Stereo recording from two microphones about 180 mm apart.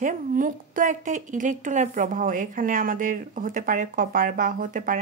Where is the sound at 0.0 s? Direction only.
45° right (ahead or behind).